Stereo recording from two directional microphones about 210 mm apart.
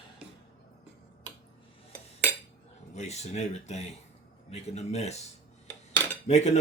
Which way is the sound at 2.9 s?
30° left (ahead or behind).